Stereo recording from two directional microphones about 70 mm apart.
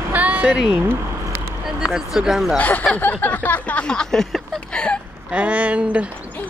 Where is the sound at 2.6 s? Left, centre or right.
Left.